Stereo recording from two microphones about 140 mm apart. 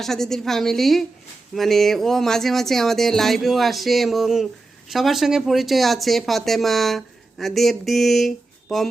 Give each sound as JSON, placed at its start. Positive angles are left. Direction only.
{"t": 0.0, "sound": "speech", "side_deg": 0}